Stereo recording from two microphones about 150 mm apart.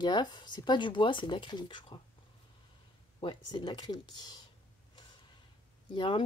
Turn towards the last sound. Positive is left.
turn(degrees=35)  # may be behind; listen again after turning